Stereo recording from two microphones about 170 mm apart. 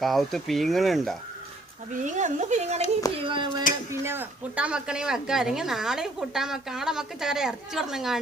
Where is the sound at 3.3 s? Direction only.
30° right (ahead or behind).